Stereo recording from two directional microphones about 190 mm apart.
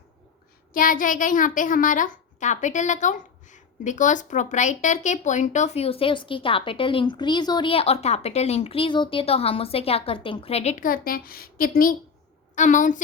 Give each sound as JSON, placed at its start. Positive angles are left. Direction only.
{"t": 0.7, "sound": "a child's voice", "side_deg": 45}